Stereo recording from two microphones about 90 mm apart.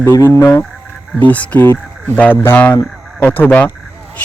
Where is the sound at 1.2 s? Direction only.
15° left (ahead or behind).